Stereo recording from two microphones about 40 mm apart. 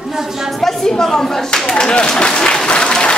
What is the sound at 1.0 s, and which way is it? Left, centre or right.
Speech, centre.